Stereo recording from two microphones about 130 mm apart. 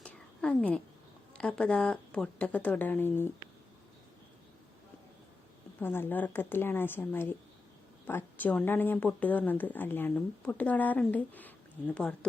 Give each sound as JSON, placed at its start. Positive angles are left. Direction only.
{"t": 0.0, "sound": "a sound", "side_deg": 10}
{"t": 1.4, "sound": "speech", "side_deg": 5}
{"t": 5.8, "sound": "speech", "side_deg": 15}